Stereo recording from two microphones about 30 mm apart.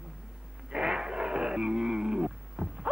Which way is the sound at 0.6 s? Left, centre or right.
Right.